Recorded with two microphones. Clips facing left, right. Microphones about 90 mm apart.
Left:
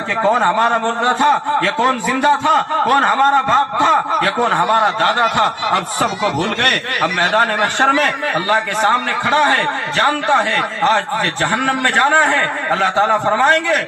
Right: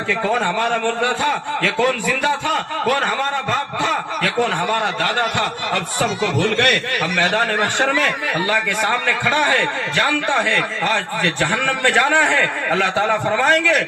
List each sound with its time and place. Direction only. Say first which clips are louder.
0.2 s a man's voice: left 8 dB; 35° left (ahead or behind)
7.9 s a man's voice: left 3 dB; 30° left (ahead or behind)